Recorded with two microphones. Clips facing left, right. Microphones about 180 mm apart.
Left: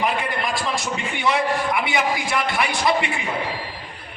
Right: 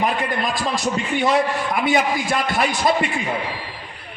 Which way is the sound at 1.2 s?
45° right (ahead or behind).